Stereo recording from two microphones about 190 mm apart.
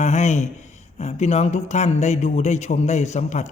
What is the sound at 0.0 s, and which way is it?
Speech, 40° left (ahead or behind).